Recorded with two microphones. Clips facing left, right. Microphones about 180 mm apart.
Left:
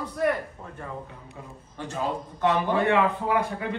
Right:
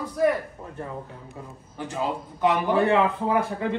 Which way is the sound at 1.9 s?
15° right (ahead or behind).